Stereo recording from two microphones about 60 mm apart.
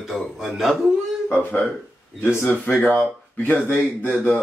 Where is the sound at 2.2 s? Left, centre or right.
Left.